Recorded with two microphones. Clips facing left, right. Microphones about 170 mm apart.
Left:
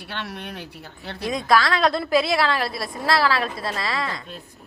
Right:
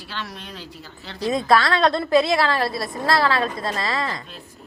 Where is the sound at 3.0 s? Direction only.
Centre (ahead or behind).